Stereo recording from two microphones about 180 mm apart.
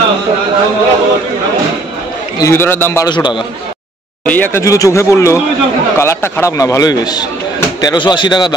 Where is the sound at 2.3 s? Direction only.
15° left (ahead or behind).